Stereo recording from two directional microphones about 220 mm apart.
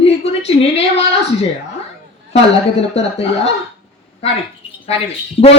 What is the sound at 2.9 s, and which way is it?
Speech, 30° left (ahead or behind).